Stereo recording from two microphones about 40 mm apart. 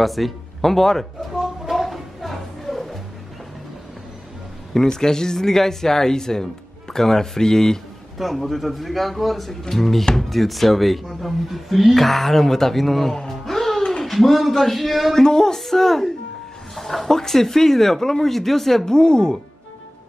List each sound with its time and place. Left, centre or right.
0.0 s speech: centre
1.3 s music: centre
4.7 s speech: centre
8.2 s speech: centre
13.3 s music: centre
14.0 s speech: centre
15.2 s speech: centre
18.9 s speech: centre